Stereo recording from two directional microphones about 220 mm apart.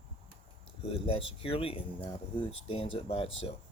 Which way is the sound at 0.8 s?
25° left (ahead or behind).